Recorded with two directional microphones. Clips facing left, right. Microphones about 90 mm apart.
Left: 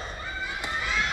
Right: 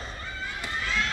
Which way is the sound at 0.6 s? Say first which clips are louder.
Even; 15° left (ahead or behind).